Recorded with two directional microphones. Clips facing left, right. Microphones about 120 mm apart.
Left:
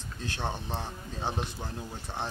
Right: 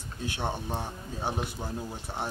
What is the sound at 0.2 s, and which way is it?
Speech, 15° right (ahead or behind).